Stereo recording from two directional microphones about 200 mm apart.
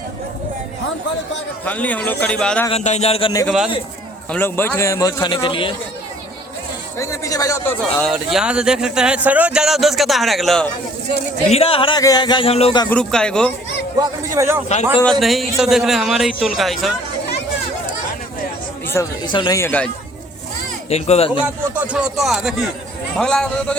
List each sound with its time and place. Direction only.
1.6 s a man's voice: 5° left (ahead or behind)
2.6 s speech: 35° left (ahead or behind)
3.4 s speech: centre (ahead or behind)
4.3 s a man's voice: 10° left (ahead or behind)
7.0 s a man's voice: 15° left (ahead or behind)
8.1 s speech: 5° right (ahead or behind)
11.4 s speech: 30° left (ahead or behind)
12.9 s speech: 5° left (ahead or behind)
14.3 s a man's voice: 15° right (ahead or behind)
15.2 s speech: centre (ahead or behind)
18.9 s a man's voice: 20° left (ahead or behind)
20.9 s speech: 30° left (ahead or behind)
21.4 s speech: 5° right (ahead or behind)